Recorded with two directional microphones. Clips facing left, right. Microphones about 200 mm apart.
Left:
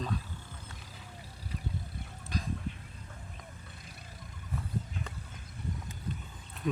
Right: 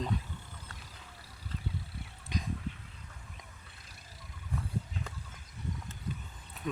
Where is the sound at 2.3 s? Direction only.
20° right (ahead or behind).